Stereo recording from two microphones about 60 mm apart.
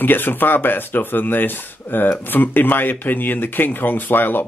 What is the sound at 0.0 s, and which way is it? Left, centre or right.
Speech, left.